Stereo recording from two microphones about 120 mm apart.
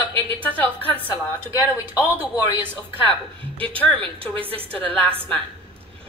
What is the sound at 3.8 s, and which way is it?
A woman's voice, 10° left (ahead or behind).